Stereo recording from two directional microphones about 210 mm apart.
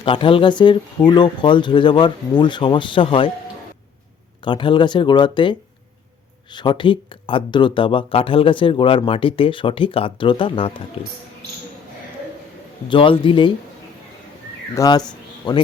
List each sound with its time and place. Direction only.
0.0 s speech: 25° left (ahead or behind)
4.4 s speech: 25° left (ahead or behind)
12.9 s speech: 25° left (ahead or behind)
14.8 s speech: 20° left (ahead or behind)
15.1 s a sound: 20° left (ahead or behind)